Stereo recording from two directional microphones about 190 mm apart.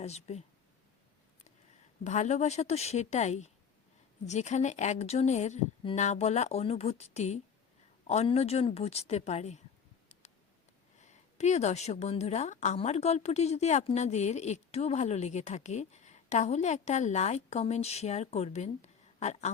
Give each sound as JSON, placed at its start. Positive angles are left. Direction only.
{"t": 0.0, "sound": "a woman's voice", "side_deg": 35}
{"t": 2.0, "sound": "a woman's voice", "side_deg": 40}
{"t": 11.0, "sound": "a woman's voice", "side_deg": 35}